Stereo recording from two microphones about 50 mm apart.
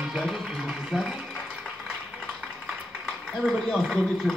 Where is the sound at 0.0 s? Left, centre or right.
Centre.